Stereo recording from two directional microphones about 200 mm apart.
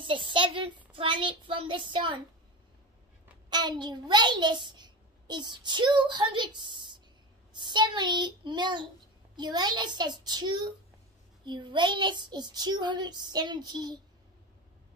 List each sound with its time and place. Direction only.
0.0 s a child's voice: 25° right (ahead or behind)
3.4 s a child's voice: 20° right (ahead or behind)